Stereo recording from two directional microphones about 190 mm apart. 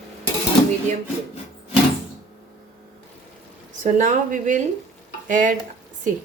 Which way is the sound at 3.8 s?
40° right (ahead or behind).